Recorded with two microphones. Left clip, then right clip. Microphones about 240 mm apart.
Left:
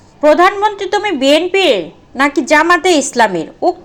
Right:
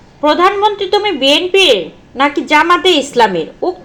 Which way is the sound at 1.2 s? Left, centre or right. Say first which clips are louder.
Even; left.